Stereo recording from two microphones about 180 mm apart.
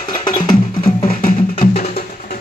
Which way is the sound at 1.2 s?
50° left (ahead or behind).